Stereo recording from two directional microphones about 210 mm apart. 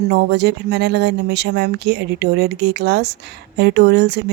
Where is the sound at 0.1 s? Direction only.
55° right (ahead or behind).